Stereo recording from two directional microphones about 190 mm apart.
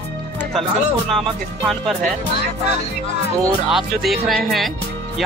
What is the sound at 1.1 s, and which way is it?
Speech, centre (ahead or behind).